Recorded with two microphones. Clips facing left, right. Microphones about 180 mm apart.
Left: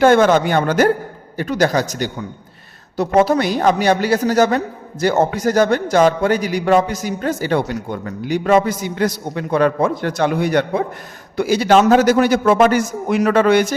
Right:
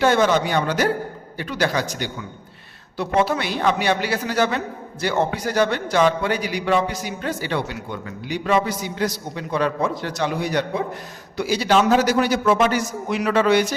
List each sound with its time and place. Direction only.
0.0 s a man's voice: 50° left (ahead or behind)